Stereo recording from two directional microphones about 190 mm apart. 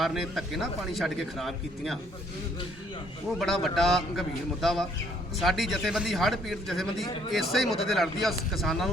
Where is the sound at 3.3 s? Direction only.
Centre (ahead or behind).